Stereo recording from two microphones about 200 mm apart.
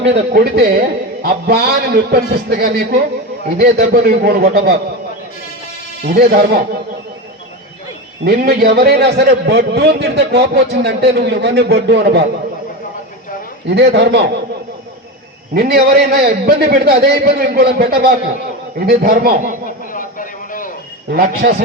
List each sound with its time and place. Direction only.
0.0 s a man's voice: 55° right (ahead or behind)
6.1 s a man's voice: 50° right (ahead or behind)
8.2 s a man's voice: 50° right (ahead or behind)
13.7 s a man's voice: 60° right (ahead or behind)
15.5 s a man's voice: 50° right (ahead or behind)
19.9 s a sound: 40° left (ahead or behind)
21.4 s a man's voice: 60° right (ahead or behind)